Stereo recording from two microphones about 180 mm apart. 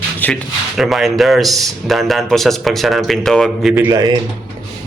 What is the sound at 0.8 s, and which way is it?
Speech, centre (ahead or behind).